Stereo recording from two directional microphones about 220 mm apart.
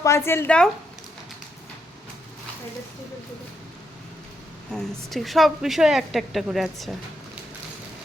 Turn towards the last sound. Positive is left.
turn(degrees=0)  # may be behind; listen again after turning